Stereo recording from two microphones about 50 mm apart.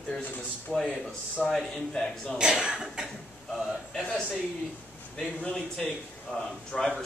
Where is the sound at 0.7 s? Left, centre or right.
Centre.